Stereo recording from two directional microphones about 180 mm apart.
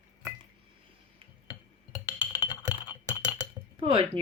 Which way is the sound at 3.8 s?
30° right (ahead or behind).